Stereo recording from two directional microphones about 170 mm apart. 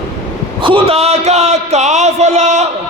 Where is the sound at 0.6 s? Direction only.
35° right (ahead or behind).